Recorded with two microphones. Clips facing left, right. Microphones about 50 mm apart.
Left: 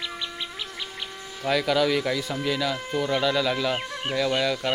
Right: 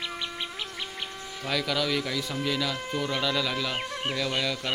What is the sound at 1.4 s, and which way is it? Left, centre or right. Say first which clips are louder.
Speech: left 6 dB; centre.